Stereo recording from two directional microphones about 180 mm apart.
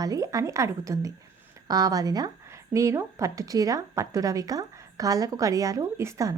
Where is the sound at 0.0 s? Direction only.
20° right (ahead or behind).